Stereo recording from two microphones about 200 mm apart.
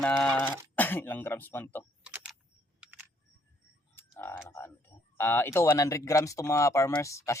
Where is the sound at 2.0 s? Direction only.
5° right (ahead or behind).